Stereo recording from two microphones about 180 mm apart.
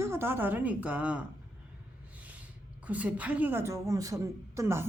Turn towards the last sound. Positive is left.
turn(degrees=-15)  # may be behind; listen again after turning